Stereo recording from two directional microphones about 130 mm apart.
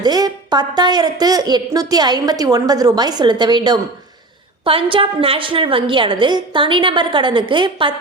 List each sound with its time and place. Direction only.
0.0 s a woman's voice: 30° right (ahead or behind)